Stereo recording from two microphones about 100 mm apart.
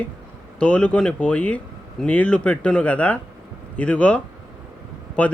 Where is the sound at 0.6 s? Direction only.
10° left (ahead or behind).